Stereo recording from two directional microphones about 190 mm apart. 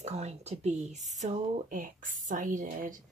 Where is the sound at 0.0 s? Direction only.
35° right (ahead or behind).